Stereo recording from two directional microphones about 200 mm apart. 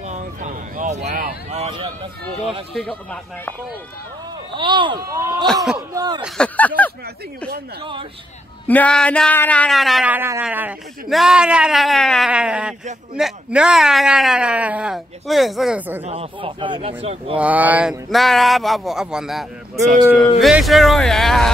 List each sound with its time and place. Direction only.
0.1 s vehicle: 40° right (ahead or behind)
1.5 s speech: 30° right (ahead or behind)
2.7 s speech: 5° left (ahead or behind)
4.6 s a man's voice: 25° right (ahead or behind)
5.5 s speech: centre (ahead or behind)
5.9 s a man's voice: 20° right (ahead or behind)
6.2 s speech: 5° left (ahead or behind)
8.6 s speech: 5° left (ahead or behind)
16.0 s a man's voice: 30° right (ahead or behind)
17.4 s speech: 10° right (ahead or behind)